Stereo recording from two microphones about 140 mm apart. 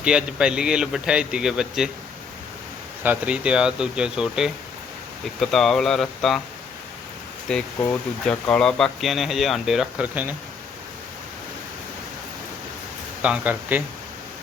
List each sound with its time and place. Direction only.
0.0 s speech: 5° right (ahead or behind)
3.0 s speech: 10° right (ahead or behind)
7.5 s speech: 5° left (ahead or behind)
13.2 s speech: 10° right (ahead or behind)